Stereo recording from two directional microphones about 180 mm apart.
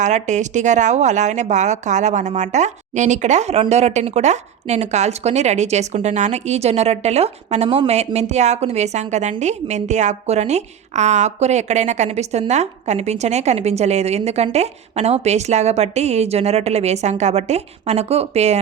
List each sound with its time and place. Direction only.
0.0 s speech: 40° right (ahead or behind)